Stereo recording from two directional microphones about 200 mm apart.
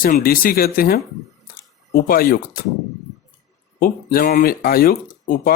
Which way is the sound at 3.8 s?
45° left (ahead or behind).